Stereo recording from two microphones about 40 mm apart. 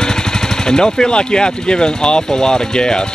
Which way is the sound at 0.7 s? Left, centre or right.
Centre.